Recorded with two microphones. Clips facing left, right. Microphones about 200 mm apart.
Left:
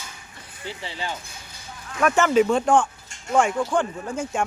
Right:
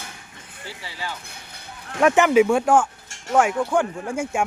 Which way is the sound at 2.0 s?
20° right (ahead or behind).